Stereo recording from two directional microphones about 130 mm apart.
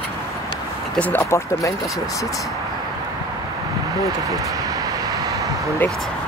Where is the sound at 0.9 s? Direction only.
10° left (ahead or behind).